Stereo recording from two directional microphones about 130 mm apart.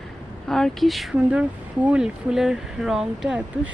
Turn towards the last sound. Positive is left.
turn(degrees=-10)  # may be behind; listen again after turning